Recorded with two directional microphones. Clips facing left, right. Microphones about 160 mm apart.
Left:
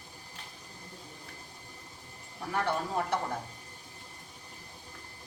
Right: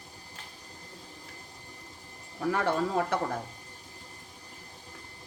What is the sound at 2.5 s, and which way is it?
Speech, 90° right.